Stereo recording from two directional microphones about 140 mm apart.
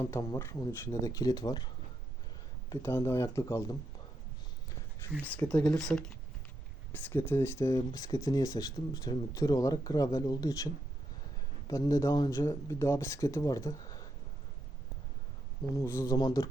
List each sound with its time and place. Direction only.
0.0 s speech: 25° left (ahead or behind)
5.2 s speech: 10° left (ahead or behind)
11.7 s speech: 25° left (ahead or behind)
15.7 s speech: 20° left (ahead or behind)